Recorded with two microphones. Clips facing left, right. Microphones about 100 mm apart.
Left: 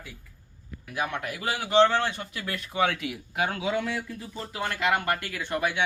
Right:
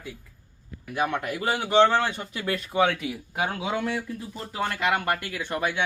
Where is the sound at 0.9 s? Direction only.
30° right (ahead or behind).